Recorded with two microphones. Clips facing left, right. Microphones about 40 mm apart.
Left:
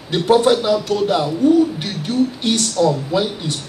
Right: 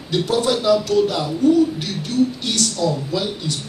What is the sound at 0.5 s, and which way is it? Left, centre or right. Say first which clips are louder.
Speech: even; centre.